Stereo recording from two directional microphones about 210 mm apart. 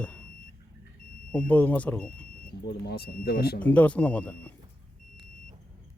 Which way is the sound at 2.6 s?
50° left (ahead or behind).